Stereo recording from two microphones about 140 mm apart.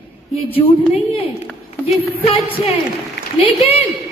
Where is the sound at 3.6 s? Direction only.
45° left (ahead or behind).